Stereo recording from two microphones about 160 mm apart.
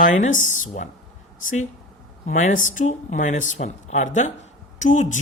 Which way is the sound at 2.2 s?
50° left (ahead or behind).